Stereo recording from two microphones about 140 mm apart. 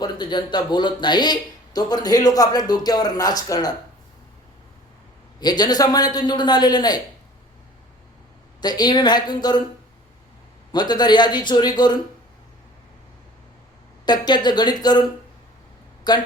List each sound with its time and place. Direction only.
0.0 s speech: 30° left (ahead or behind)
5.4 s speech: 30° left (ahead or behind)
8.6 s a man's voice: 30° left (ahead or behind)
10.7 s a man's voice: 30° left (ahead or behind)
14.0 s a man's voice: 30° left (ahead or behind)
16.1 s a man's voice: 30° left (ahead or behind)